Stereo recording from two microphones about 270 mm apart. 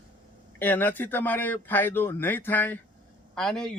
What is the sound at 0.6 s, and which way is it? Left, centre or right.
A man's voice, centre.